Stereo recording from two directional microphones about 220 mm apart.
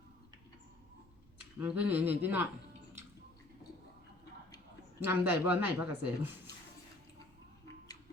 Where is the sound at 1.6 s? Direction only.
5° right (ahead or behind).